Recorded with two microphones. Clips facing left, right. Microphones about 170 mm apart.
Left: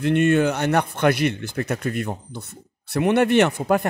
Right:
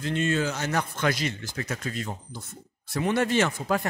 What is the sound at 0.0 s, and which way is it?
A man's voice, 60° left (ahead or behind).